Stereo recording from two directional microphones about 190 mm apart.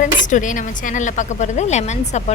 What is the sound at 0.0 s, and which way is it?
Speech, 40° left (ahead or behind).